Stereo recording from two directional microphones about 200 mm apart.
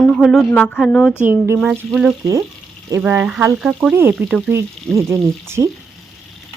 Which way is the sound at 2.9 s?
10° right (ahead or behind).